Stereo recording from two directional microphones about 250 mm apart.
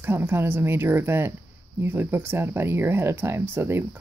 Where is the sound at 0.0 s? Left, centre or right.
Centre.